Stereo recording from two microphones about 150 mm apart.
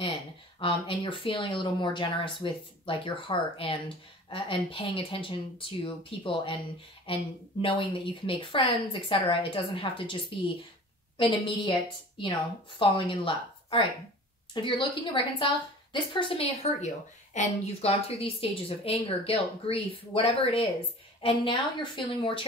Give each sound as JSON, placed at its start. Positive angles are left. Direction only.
{"t": 0.6, "sound": "a woman's voice", "side_deg": 35}
{"t": 11.1, "sound": "a woman's voice", "side_deg": 35}
{"t": 16.8, "sound": "a woman's voice", "side_deg": 50}